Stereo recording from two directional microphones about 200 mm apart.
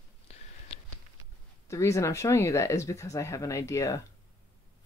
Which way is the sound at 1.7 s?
15° left (ahead or behind).